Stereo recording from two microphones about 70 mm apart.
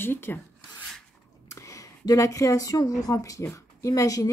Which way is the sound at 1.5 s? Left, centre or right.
Left.